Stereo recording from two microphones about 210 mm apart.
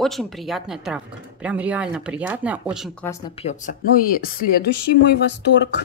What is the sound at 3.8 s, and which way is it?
A woman's voice, 45° left (ahead or behind).